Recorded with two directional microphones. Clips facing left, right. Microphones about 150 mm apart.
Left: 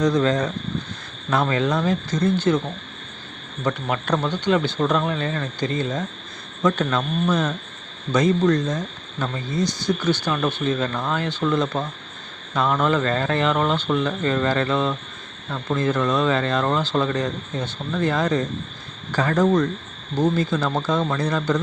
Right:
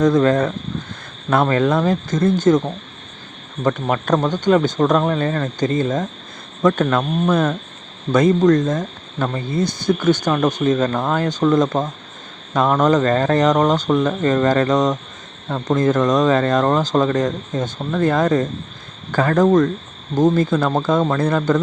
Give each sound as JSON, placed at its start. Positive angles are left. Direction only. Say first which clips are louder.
{"t": 0.0, "sound": "speech", "louder": "right 5 dB", "side_deg": -50}
{"t": 3.6, "sound": "speech", "louder": "right 5 dB", "side_deg": -45}